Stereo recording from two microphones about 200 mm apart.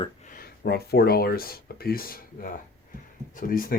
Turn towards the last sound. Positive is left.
turn(degrees=45)  # may be behind; listen again after turning